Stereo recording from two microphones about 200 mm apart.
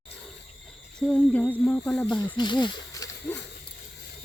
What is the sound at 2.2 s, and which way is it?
Speech, 20° left (ahead or behind).